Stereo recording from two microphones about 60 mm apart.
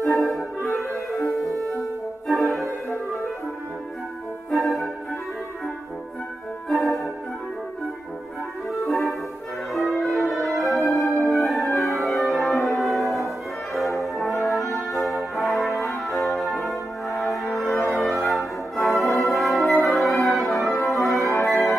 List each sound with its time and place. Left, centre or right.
0.9 s music: left
2.2 s music: centre
4.5 s music: centre
6.7 s music: centre
8.8 s music: centre
13.7 s brass instrument: centre
17.2 s music: centre